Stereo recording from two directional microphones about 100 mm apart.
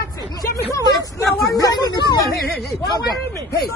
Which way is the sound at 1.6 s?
40° left (ahead or behind).